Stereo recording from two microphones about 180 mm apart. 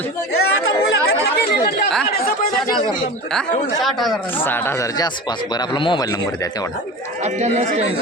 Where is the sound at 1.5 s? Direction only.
60° left (ahead or behind).